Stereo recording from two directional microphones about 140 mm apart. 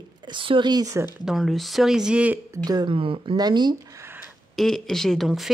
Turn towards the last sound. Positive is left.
turn(degrees=0)  # may be behind; listen again after turning